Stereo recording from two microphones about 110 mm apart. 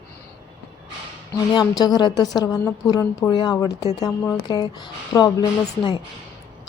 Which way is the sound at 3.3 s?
45° left (ahead or behind).